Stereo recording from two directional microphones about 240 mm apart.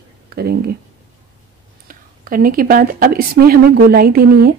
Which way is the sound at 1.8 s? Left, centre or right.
Right.